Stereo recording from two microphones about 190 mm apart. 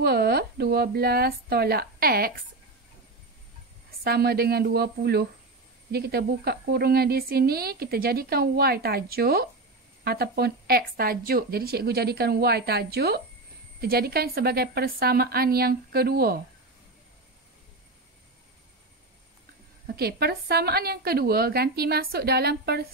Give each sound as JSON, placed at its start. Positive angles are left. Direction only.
{"t": 0.0, "sound": "a woman's voice", "side_deg": -55}
{"t": 4.0, "sound": "a woman's voice", "side_deg": -55}
{"t": 20.0, "sound": "a woman's voice", "side_deg": -55}